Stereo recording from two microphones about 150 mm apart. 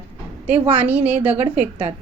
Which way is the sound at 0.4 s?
10° right (ahead or behind).